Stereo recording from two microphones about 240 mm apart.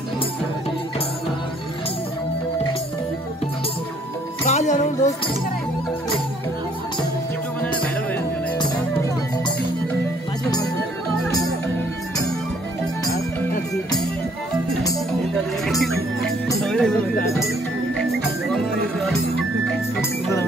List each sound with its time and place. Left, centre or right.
4.5 s music: left
7.6 s music: centre
15.6 s music: centre
18.5 s music: centre
20.0 s music: centre